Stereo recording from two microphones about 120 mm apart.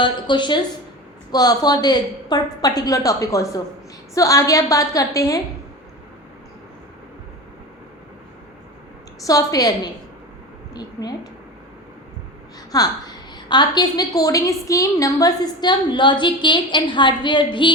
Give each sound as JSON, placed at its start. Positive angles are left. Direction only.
{"t": 0.0, "sound": "a woman's voice", "side_deg": 40}
{"t": 9.2, "sound": "a woman's voice", "side_deg": 30}
{"t": 12.7, "sound": "a woman's voice", "side_deg": 30}